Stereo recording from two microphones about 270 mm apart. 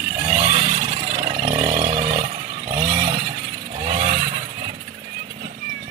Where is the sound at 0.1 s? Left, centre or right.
Centre.